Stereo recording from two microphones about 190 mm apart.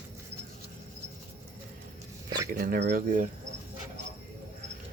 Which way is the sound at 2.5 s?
50° right (ahead or behind).